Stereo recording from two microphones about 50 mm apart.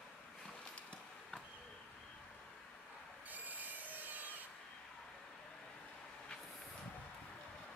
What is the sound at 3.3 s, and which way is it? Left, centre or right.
Wood, right.